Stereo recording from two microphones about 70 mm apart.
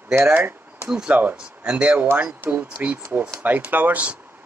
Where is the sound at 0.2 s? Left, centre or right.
Right.